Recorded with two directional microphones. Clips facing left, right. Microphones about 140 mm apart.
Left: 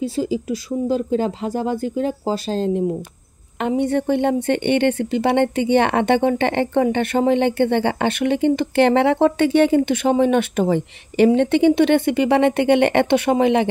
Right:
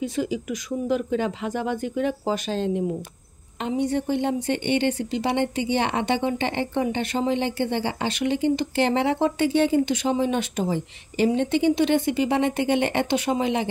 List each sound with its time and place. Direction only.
0.0 s speech: 30° left (ahead or behind)
3.5 s a woman's voice: 60° left (ahead or behind)